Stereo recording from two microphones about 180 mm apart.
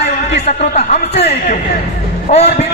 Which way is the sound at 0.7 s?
40° left (ahead or behind).